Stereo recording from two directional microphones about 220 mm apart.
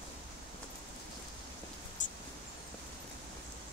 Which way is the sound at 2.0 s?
35° left (ahead or behind).